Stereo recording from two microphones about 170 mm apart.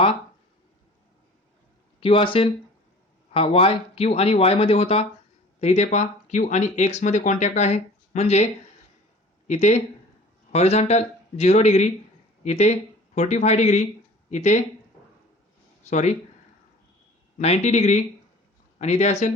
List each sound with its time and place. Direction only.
2.0 s speech: 30° left (ahead or behind)
9.5 s speech: 40° left (ahead or behind)
15.9 s speech: 45° left (ahead or behind)
17.3 s speech: 40° left (ahead or behind)